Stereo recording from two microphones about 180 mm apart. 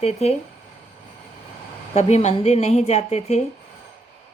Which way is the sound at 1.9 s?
40° left (ahead or behind).